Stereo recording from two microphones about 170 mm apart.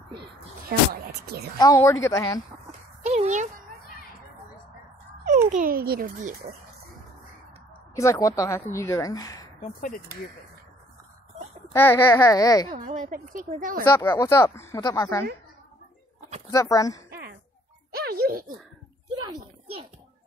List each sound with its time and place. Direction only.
0.7 s speech: 65° right (ahead or behind)
1.6 s a woman's voice: 20° left (ahead or behind)
3.0 s a sound: 40° right (ahead or behind)
5.5 s a child's voice: 55° right (ahead or behind)
7.9 s a woman's voice: 20° left (ahead or behind)
9.6 s speech: 50° left (ahead or behind)
11.7 s speech: 15° left (ahead or behind)
12.6 s speech: 45° right (ahead or behind)
13.9 s speech: 15° left (ahead or behind)
16.5 s a woman's voice: 20° left (ahead or behind)
17.1 s a sound: 70° right (ahead or behind)
19.2 s a sound: 30° right (ahead or behind)